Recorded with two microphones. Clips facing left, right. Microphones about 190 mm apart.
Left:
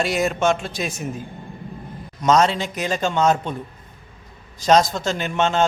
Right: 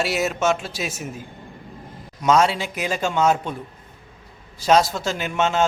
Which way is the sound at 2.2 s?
10° right (ahead or behind).